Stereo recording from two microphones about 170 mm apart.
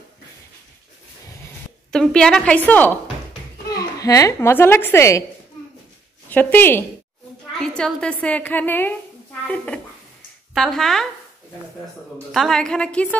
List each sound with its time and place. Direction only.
1.9 s a woman's voice: 5° left (ahead or behind)
3.7 s a child's voice: 20° left (ahead or behind)
6.3 s a woman's voice: 10° left (ahead or behind)
10.5 s a woman's voice: centre (ahead or behind)
12.3 s a woman's voice: centre (ahead or behind)